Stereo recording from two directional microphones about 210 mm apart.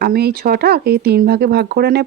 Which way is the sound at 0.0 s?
45° right (ahead or behind).